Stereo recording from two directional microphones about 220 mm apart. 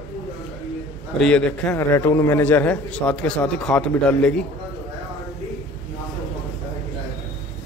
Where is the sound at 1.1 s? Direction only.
5° left (ahead or behind).